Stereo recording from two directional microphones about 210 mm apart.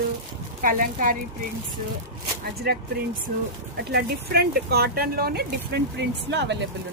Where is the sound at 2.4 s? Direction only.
50° right (ahead or behind).